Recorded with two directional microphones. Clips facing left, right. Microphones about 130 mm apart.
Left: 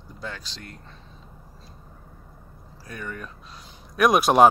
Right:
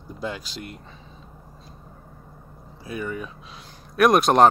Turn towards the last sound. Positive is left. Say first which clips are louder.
# right 1 dB
turn(degrees=5)  # may be behind; listen again after turning